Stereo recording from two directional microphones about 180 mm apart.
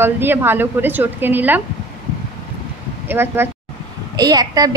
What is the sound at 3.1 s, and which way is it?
A woman's voice, 10° right (ahead or behind).